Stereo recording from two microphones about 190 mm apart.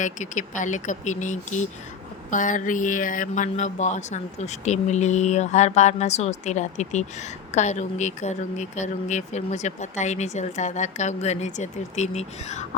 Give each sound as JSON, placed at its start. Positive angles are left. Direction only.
{"t": 0.0, "sound": "speech", "side_deg": 40}